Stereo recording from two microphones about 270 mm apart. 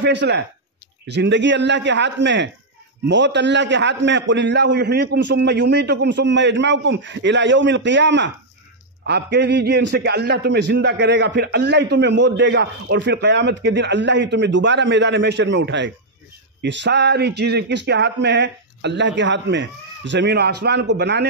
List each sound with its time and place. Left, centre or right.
0.0 s a man's voice: right